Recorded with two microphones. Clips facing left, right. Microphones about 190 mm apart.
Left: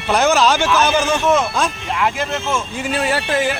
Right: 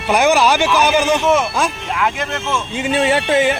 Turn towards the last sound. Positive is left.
turn(degrees=-20)  # may be behind; listen again after turning